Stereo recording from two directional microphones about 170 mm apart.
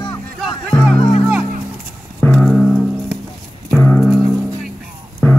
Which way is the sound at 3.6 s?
10° left (ahead or behind).